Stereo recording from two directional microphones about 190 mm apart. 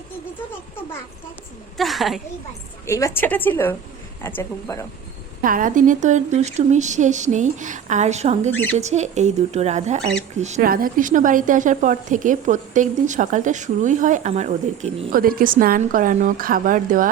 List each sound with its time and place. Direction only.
1.8 s a woman's voice: centre (ahead or behind)
2.8 s a woman's voice: 15° left (ahead or behind)
5.4 s speech: 45° right (ahead or behind)
10.7 s a woman's voice: 50° right (ahead or behind)